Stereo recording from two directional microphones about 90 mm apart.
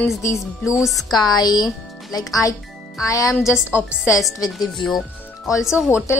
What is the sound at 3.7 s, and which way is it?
Speech, 25° left (ahead or behind).